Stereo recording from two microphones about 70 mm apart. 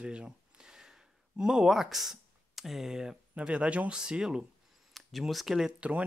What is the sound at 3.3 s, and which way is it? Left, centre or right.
Speech, centre.